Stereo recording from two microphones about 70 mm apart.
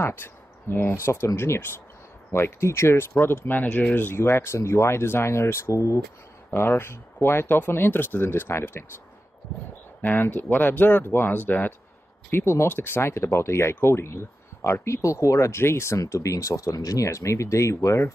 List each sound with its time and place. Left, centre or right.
0.0 s speech: left
10.0 s speech: left